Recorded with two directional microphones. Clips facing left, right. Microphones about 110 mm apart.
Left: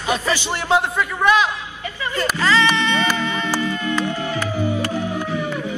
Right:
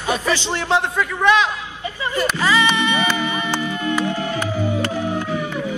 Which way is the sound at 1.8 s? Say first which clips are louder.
Right 2 dB; 20° right (ahead or behind).